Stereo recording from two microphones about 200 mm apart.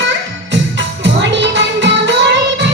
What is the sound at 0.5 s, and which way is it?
Music, 60° right (ahead or behind).